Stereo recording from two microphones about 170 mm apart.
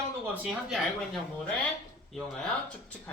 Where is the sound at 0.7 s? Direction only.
Centre (ahead or behind).